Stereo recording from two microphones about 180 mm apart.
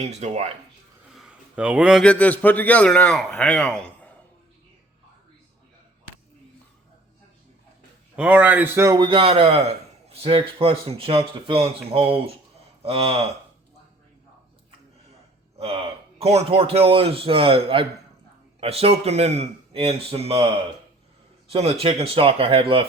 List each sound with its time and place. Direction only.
0.0 s a man's voice: 35° right (ahead or behind)
1.1 s a man's voice: 5° right (ahead or behind)
8.1 s a man's voice: 5° right (ahead or behind); by 13.3 s 35° right (ahead or behind)
15.5 s a man's voice: 30° right (ahead or behind)
21.5 s a man's voice: 35° right (ahead or behind)